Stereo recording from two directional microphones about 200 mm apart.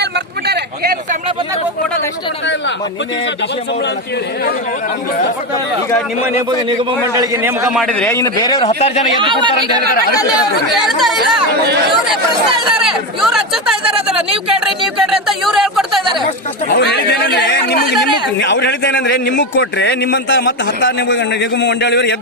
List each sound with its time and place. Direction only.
0.0 s a sound: 55° right (ahead or behind)
6.7 s a man's voice: 15° right (ahead or behind)
7.7 s a man's voice: 5° left (ahead or behind); by 9.0 s 30° left (ahead or behind)
10.8 s speech: centre (ahead or behind)
12.8 s speech: centre (ahead or behind)
16.7 s a man's voice: 55° left (ahead or behind)